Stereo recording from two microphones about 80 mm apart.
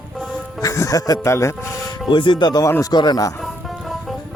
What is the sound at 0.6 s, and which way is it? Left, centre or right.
Music, left.